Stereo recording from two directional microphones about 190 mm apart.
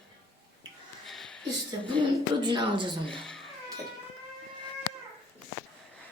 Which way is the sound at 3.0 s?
5° left (ahead or behind).